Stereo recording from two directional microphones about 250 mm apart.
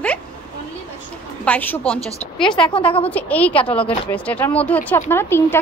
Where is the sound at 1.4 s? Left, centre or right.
Centre.